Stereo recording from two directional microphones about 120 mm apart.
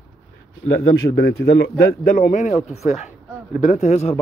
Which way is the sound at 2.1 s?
90° left.